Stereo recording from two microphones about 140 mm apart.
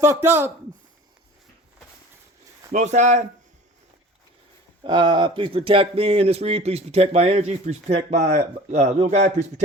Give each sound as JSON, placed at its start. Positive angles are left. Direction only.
{"t": 0.0, "sound": "a man's voice", "side_deg": -20}
{"t": 2.7, "sound": "speech", "side_deg": -60}
{"t": 4.8, "sound": "speech", "side_deg": -35}